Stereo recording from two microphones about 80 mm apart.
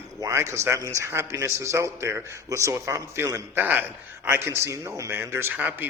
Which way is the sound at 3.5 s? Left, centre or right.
Right.